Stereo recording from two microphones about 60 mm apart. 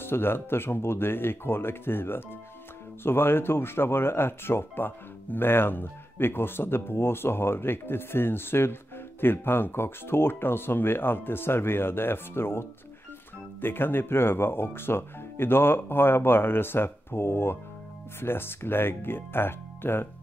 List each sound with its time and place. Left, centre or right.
0.0 s speech: left